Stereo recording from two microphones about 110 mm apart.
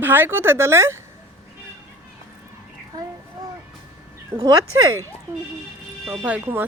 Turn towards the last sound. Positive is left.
turn(degrees=-15)  # may be behind; listen again after turning